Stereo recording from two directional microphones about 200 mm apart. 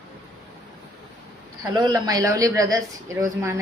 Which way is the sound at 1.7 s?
20° right (ahead or behind).